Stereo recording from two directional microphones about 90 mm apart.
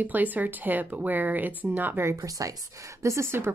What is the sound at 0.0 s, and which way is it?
A woman's voice, 20° right (ahead or behind).